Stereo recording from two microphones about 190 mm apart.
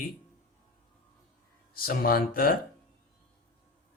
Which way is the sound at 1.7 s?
50° left (ahead or behind).